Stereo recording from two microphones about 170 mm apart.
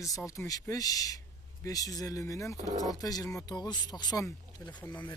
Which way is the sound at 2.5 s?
45° right (ahead or behind).